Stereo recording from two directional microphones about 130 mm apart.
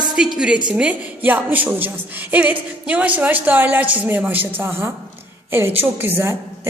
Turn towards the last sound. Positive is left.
turn(degrees=-20)  # may be behind; listen again after turning